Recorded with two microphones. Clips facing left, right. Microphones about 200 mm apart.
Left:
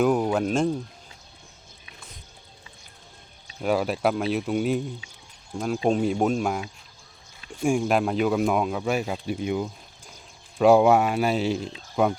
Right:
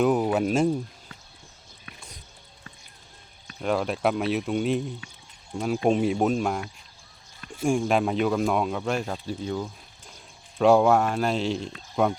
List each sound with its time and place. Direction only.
0.0 s speech: 5° right (ahead or behind)
3.6 s speech: 5° left (ahead or behind)
5.0 s a sound: 60° right (ahead or behind)
5.5 s speech: centre (ahead or behind)